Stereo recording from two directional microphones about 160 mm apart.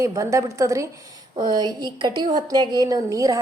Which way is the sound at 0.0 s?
20° right (ahead or behind).